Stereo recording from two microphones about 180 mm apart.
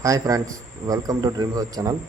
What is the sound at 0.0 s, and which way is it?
A man's voice, 20° right (ahead or behind).